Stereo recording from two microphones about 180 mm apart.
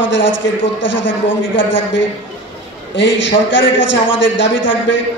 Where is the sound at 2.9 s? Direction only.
90° left.